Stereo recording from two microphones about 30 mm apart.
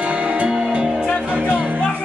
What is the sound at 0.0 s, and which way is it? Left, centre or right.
Music, right.